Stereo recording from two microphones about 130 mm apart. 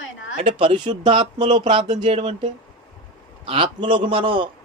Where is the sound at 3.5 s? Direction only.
40° right (ahead or behind).